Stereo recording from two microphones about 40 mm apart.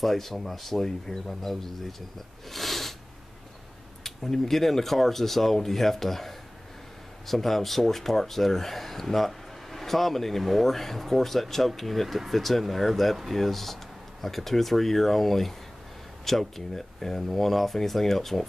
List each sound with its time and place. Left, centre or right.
0.0 s speech: centre
4.0 s speech: centre